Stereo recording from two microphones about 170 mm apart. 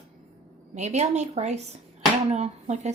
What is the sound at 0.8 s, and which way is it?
Speech, 40° right (ahead or behind).